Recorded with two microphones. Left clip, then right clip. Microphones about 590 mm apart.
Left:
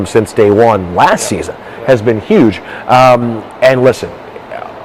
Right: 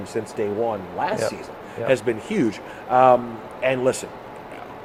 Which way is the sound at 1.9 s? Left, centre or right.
Left.